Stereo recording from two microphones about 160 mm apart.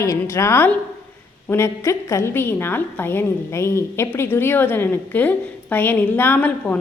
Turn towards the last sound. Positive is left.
turn(degrees=10)  # may be behind; listen again after turning